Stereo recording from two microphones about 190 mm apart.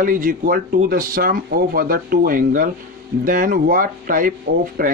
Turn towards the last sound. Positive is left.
turn(degrees=-50)  # may be behind; listen again after turning